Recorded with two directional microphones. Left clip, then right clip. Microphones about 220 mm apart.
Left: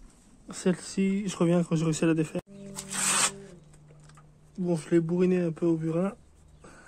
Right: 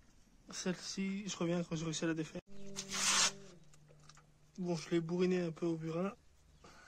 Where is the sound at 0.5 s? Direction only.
15° left (ahead or behind).